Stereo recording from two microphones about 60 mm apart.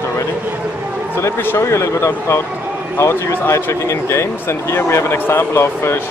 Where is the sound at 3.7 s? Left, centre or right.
Left.